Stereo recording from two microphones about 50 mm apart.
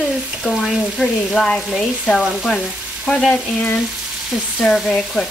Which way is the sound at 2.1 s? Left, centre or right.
Centre.